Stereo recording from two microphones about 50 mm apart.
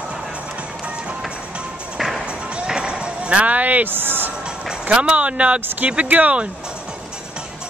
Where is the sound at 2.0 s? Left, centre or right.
Centre.